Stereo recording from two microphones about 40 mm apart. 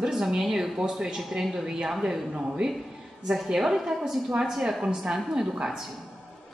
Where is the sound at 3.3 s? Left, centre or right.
Centre.